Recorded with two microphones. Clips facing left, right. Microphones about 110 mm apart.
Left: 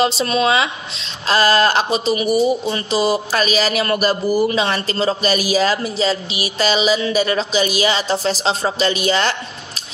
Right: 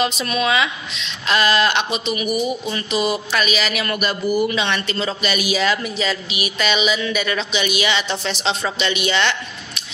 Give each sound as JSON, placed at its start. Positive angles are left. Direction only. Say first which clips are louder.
{"t": 0.0, "sound": "speech", "louder": "left 4 dB", "side_deg": 30}